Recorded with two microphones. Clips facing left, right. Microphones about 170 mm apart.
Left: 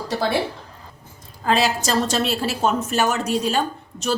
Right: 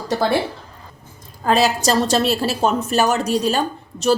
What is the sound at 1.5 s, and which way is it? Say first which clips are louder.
A woman's voice: right 3 dB; 40° right (ahead or behind).